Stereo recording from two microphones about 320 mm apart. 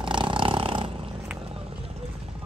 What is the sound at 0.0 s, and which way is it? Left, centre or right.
Roar, centre.